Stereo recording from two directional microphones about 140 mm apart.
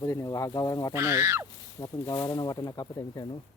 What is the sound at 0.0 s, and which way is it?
Speech, 25° left (ahead or behind).